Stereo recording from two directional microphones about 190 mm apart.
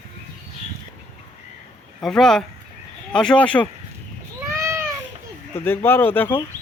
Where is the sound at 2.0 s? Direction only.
Centre (ahead or behind).